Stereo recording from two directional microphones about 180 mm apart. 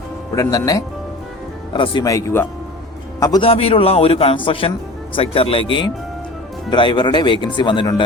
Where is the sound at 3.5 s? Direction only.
35° left (ahead or behind).